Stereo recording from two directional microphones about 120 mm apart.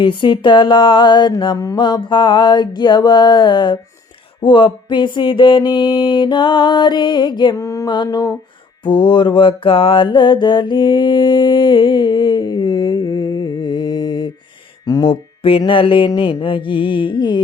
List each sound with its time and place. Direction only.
0.0 s mantra: 40° left (ahead or behind)
8.8 s mantra: 45° left (ahead or behind)
15.0 s mantra: 50° left (ahead or behind)